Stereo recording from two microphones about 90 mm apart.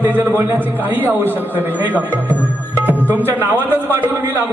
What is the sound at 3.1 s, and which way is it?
A man's voice, 25° right (ahead or behind).